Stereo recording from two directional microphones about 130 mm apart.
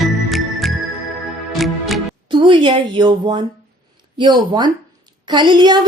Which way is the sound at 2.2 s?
40° right (ahead or behind).